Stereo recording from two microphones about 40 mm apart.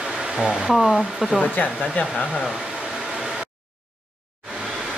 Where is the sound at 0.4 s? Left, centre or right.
Centre.